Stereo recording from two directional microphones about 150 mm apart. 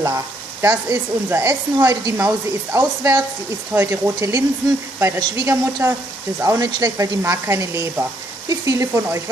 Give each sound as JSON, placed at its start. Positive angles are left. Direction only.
{"t": 0.0, "sound": "speech", "side_deg": -20}